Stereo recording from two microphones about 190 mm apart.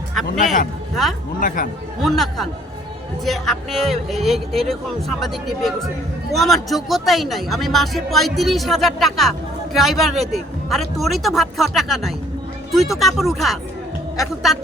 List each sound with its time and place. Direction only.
0.1 s a man's voice: centre (ahead or behind)
1.4 s speech: 45° left (ahead or behind)
2.0 s speech: centre (ahead or behind)